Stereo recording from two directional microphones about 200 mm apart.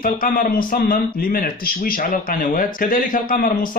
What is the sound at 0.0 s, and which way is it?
Speech, 45° left (ahead or behind).